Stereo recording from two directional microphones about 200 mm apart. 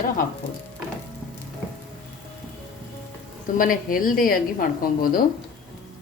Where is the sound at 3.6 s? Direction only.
45° left (ahead or behind).